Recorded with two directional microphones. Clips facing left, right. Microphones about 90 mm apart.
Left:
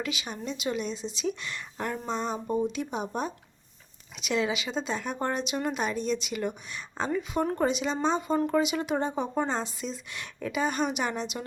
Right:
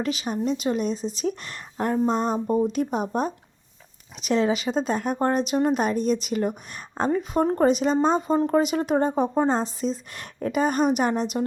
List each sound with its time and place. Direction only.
0.0 s a woman's voice: 40° right (ahead or behind)